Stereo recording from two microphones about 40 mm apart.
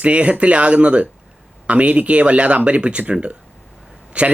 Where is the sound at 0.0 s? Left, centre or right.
Right.